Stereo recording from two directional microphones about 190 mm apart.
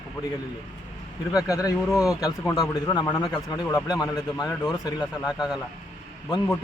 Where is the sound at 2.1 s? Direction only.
20° left (ahead or behind).